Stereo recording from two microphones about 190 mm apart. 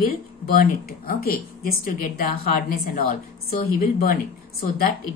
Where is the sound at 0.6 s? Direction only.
50° left (ahead or behind).